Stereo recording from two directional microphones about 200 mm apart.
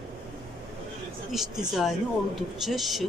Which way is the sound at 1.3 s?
Centre (ahead or behind).